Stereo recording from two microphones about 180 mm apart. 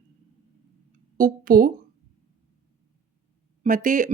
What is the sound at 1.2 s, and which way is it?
Speech, 50° right (ahead or behind).